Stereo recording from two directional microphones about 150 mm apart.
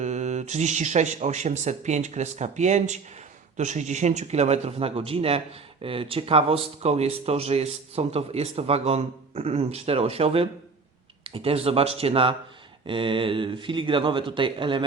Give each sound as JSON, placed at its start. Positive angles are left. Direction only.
{"t": 0.0, "sound": "speech", "side_deg": -50}